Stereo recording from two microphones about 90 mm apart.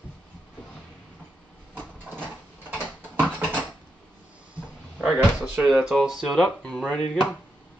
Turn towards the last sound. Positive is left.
turn(degrees=15)  # may be behind; listen again after turning